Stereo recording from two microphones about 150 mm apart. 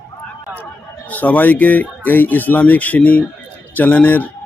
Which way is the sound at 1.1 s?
10° left (ahead or behind).